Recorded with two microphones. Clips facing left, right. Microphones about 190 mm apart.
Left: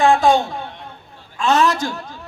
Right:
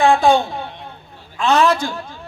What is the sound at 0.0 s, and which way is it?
A woman's voice, 45° left (ahead or behind).